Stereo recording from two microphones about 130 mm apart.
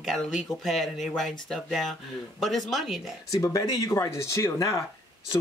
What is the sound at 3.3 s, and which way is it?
Speech, 25° left (ahead or behind).